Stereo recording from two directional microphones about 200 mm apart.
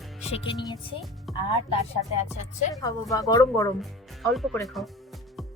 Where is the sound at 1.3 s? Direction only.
Centre (ahead or behind).